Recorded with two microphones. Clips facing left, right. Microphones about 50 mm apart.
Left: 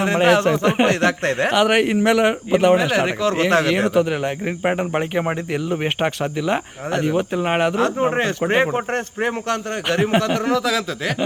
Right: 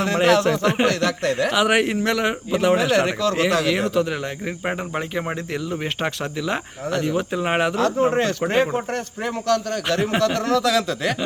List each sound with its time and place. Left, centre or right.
0.0 s a man's voice: left
0.9 s speech: left
1.5 s speech: centre
2.5 s a man's voice: left
2.7 s speech: centre
3.2 s a man's voice: left
3.5 s a man's voice: left
5.6 s a man's voice: left
7.4 s speech: centre
7.8 s a man's voice: left; by 11.1 s centre